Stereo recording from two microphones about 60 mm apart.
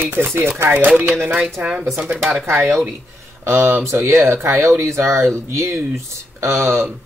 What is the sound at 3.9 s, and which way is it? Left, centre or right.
Speech, right.